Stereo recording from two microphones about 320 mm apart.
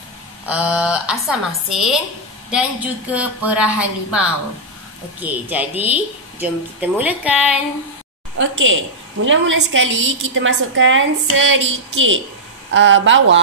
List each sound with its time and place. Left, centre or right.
0.5 s a woman's voice: centre
8.4 s a woman's voice: right